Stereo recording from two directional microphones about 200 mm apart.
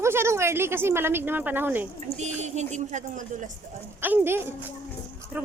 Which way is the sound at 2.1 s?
35° right (ahead or behind).